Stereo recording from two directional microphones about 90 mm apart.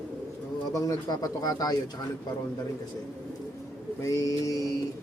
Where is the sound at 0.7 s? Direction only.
40° left (ahead or behind).